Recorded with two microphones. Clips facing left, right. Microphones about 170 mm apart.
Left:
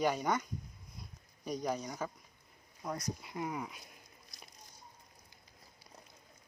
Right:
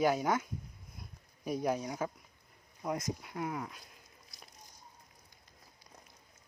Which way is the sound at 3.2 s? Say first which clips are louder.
Right 1 dB; 5° left (ahead or behind).